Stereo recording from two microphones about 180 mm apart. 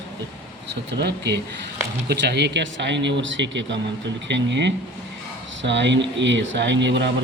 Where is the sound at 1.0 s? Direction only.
70° right (ahead or behind).